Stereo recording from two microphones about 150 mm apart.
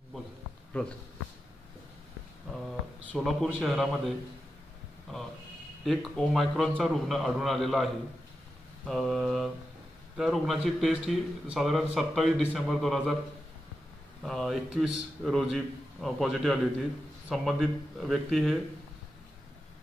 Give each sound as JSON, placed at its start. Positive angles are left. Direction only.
{"t": 0.8, "sound": "speech", "side_deg": 5}
{"t": 3.1, "sound": "speech", "side_deg": 5}
{"t": 5.9, "sound": "speech", "side_deg": 0}
{"t": 14.2, "sound": "speech", "side_deg": 0}